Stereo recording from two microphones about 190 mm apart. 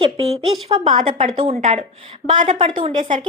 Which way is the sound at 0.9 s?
30° right (ahead or behind).